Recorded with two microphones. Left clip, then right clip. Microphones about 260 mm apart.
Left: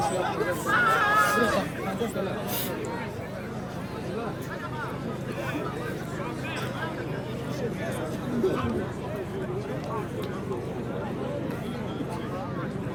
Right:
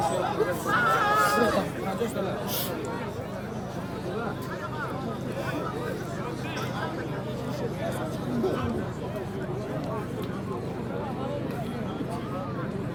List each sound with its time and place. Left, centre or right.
0.0 s hubbub: right